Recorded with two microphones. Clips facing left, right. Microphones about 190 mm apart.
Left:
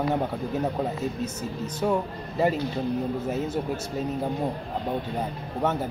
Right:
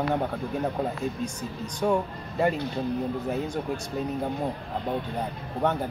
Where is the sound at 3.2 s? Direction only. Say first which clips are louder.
Left 1 dB; 5° left (ahead or behind).